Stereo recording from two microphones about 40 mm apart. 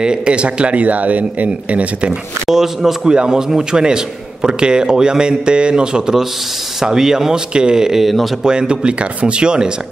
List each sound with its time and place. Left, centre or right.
0.0 s speech: right
2.5 s a man's voice: centre
8.0 s speech: centre
8.5 s a man's voice: right